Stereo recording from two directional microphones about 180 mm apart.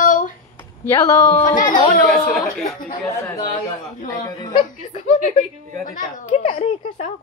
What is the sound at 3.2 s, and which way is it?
Speech, 15° left (ahead or behind).